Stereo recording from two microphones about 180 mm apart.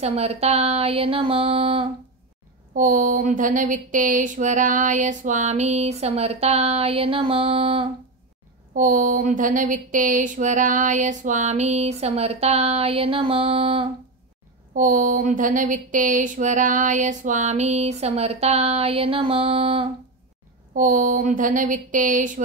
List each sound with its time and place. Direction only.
0.0 s speech: 35° right (ahead or behind)
2.7 s speech: 45° right (ahead or behind); by 7.8 s 30° right (ahead or behind)
8.7 s speech: 45° right (ahead or behind)
14.8 s speech: 45° right (ahead or behind); by 19.9 s 30° right (ahead or behind)
20.7 s speech: 45° right (ahead or behind)